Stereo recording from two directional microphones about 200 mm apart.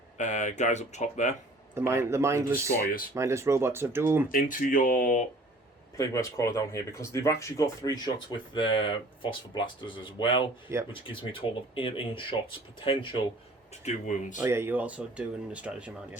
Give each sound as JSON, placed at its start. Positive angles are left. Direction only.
{"t": 0.2, "sound": "speech", "side_deg": 35}
{"t": 1.7, "sound": "speech", "side_deg": -10}
{"t": 4.3, "sound": "speech", "side_deg": 45}
{"t": 6.0, "sound": "speech", "side_deg": 15}
{"t": 10.7, "sound": "speech", "side_deg": -15}
{"t": 11.0, "sound": "speech", "side_deg": 25}
{"t": 13.8, "sound": "speech", "side_deg": 40}
{"t": 14.4, "sound": "speech", "side_deg": -10}